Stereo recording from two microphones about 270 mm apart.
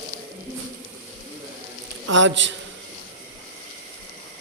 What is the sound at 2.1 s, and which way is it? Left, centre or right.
Speech, right.